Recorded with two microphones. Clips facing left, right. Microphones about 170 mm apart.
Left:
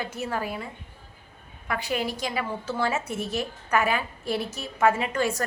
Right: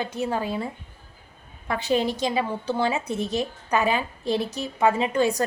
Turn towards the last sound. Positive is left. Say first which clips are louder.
# right 4 dB
turn(degrees=-20)  # may be behind; listen again after turning